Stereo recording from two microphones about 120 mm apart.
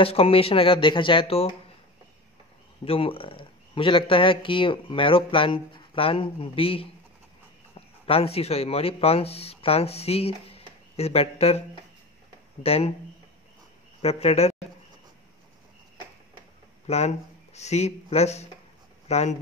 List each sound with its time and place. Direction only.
0.0 s speech: 50° left (ahead or behind)
2.8 s speech: 50° left (ahead or behind)
8.1 s speech: 55° left (ahead or behind)
12.6 s speech: 55° left (ahead or behind)
14.0 s speech: 60° left (ahead or behind)
16.8 s speech: 65° left (ahead or behind)